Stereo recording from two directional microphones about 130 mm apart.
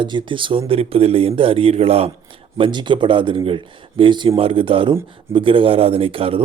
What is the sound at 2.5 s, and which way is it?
Speech, 40° right (ahead or behind).